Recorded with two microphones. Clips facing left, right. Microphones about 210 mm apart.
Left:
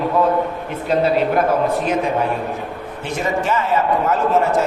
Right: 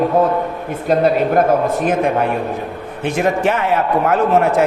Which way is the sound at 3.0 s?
60° right (ahead or behind).